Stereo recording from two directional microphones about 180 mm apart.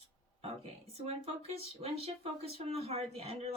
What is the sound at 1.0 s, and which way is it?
Speech, 35° right (ahead or behind).